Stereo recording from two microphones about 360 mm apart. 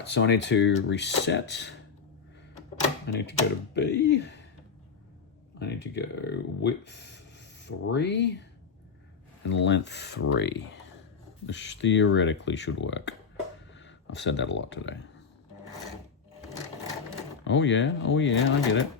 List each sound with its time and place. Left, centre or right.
0.0 s speech: left
3.1 s speech: left
5.5 s speech: left
9.5 s speech: left
17.4 s speech: left